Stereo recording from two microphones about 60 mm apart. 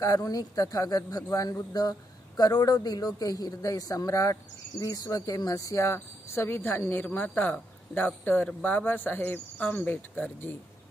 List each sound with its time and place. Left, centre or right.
0.0 s a man's voice: left
4.8 s speech: left
6.3 s speech: left